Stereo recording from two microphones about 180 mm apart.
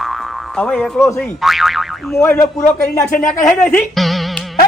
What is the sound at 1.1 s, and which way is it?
Speech, centre (ahead or behind).